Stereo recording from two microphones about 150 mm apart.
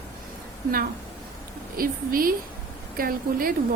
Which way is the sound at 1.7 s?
70° right (ahead or behind).